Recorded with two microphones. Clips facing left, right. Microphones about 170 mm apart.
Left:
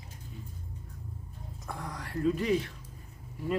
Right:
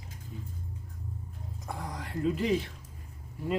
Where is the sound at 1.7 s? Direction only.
25° right (ahead or behind).